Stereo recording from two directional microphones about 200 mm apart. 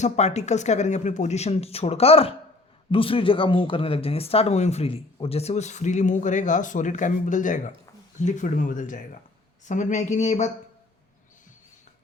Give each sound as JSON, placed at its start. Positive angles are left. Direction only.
{"t": 0.0, "sound": "a man's voice", "side_deg": 35}